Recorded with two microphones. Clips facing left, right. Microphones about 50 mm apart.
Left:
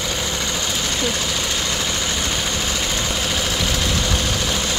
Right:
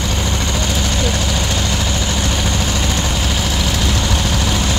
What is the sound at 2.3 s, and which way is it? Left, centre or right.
Vehicle, centre.